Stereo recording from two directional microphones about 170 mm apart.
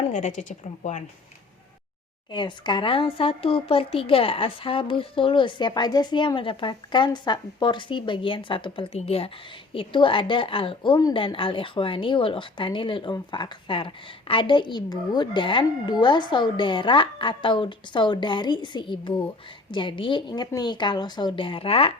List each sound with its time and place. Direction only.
0.0 s a woman's voice: 45° left (ahead or behind)
2.3 s speech: 25° left (ahead or behind)